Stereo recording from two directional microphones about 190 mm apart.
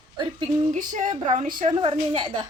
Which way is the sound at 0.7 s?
45° right (ahead or behind).